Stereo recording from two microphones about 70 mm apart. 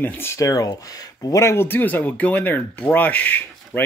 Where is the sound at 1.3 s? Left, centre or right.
Left.